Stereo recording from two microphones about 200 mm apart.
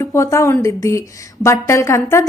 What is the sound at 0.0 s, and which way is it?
A woman's voice, 15° left (ahead or behind).